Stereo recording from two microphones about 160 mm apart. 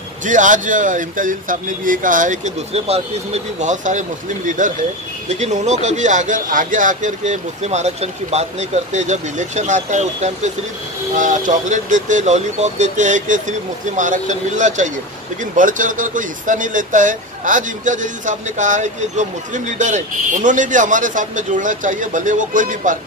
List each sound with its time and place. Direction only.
0.2 s speech: 50° right (ahead or behind)